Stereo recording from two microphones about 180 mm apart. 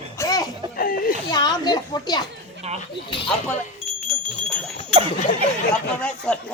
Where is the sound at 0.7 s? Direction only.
55° left (ahead or behind).